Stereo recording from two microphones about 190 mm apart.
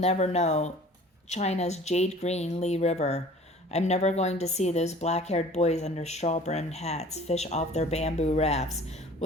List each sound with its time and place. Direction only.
0.0 s speech: 35° left (ahead or behind)